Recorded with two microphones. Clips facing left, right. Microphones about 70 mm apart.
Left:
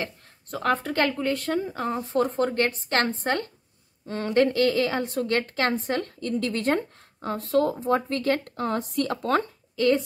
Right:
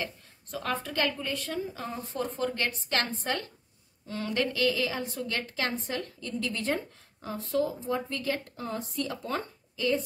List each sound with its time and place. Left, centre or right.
0.0 s a woman's voice: left